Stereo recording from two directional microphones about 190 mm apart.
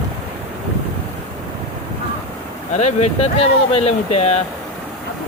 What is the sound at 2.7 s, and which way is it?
Speech, 35° left (ahead or behind).